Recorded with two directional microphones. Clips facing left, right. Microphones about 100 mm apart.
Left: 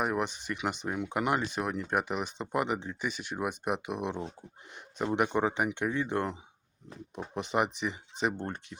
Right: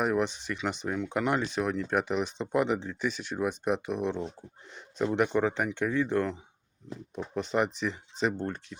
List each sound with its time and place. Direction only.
0.0 s speech: 5° left (ahead or behind)
7.5 s speech: 15° left (ahead or behind)